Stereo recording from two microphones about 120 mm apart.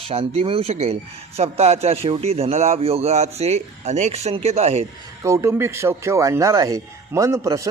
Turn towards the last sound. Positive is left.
turn(degrees=-25)  # may be behind; listen again after turning